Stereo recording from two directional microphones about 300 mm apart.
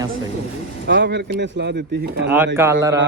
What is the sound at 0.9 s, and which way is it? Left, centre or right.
Speech, right.